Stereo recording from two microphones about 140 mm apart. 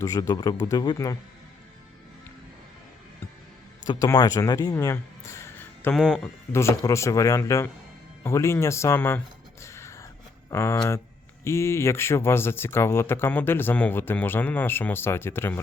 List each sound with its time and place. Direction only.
0.0 s speech: 25° left (ahead or behind)
3.8 s speech: 25° left (ahead or behind)
5.9 s speech: 5° left (ahead or behind)
6.5 s speech: 20° left (ahead or behind)
8.2 s music: 20° left (ahead or behind)
10.5 s speech: 20° left (ahead or behind)